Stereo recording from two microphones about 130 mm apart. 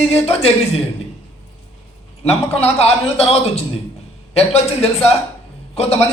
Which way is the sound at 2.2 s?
55° left (ahead or behind).